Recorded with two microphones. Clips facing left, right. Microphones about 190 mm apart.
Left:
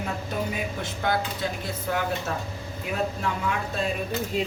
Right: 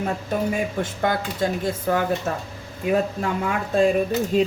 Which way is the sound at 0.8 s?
45° right (ahead or behind).